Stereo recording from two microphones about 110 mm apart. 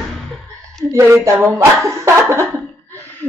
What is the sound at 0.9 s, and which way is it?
Speech, 25° right (ahead or behind).